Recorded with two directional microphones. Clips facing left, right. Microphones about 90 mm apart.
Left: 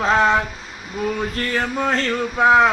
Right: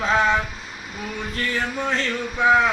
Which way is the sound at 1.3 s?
45° left (ahead or behind).